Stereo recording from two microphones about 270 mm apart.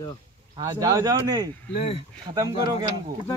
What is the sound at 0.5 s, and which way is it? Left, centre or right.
Speech, centre.